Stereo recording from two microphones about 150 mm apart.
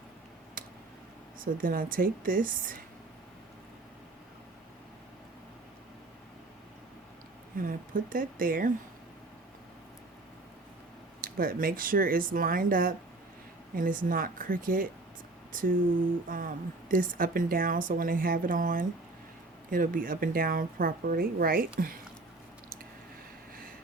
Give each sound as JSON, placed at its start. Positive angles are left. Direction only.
{"t": 0.6, "sound": "a sound", "side_deg": -70}
{"t": 1.6, "sound": "a woman's voice", "side_deg": -70}
{"t": 7.6, "sound": "a woman's voice", "side_deg": -65}
{"t": 11.2, "sound": "a woman's voice", "side_deg": -70}